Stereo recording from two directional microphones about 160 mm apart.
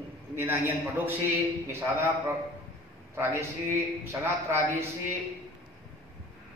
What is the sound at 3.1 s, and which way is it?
A man's voice, 15° right (ahead or behind).